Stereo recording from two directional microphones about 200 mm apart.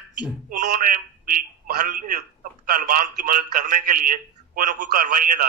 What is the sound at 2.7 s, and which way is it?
A man's voice, 45° right (ahead or behind).